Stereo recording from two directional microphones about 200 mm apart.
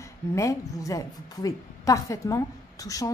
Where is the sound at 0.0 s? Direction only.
15° left (ahead or behind).